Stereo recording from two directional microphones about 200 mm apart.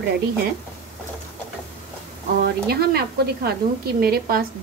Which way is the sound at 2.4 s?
50° right (ahead or behind).